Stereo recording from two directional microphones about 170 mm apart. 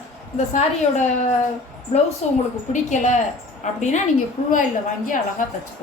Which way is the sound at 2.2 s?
40° left (ahead or behind).